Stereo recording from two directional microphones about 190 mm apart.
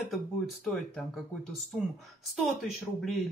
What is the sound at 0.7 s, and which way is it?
Speech, 5° left (ahead or behind).